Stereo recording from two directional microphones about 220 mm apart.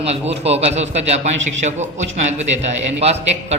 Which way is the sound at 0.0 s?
30° right (ahead or behind).